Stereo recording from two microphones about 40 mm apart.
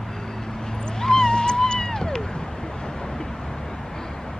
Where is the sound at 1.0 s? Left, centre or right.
Centre.